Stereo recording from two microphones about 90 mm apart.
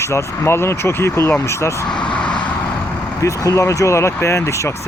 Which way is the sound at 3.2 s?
35° left (ahead or behind).